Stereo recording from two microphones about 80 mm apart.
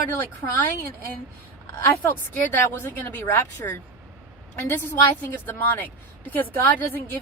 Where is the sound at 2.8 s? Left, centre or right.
Left.